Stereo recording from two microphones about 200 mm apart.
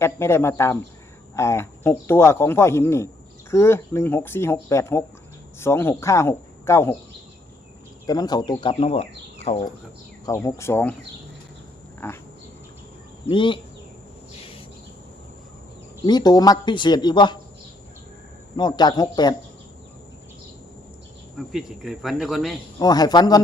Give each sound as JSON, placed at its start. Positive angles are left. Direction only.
{"t": 0.0, "sound": "speech", "side_deg": 10}
{"t": 8.0, "sound": "speech", "side_deg": 20}
{"t": 10.2, "sound": "speech", "side_deg": 15}
{"t": 11.9, "sound": "a sound", "side_deg": 10}
{"t": 13.2, "sound": "speech", "side_deg": 25}
{"t": 16.0, "sound": "speech", "side_deg": 20}
{"t": 18.5, "sound": "speech", "side_deg": 20}
{"t": 21.3, "sound": "speech", "side_deg": 0}
{"t": 22.8, "sound": "speech", "side_deg": 20}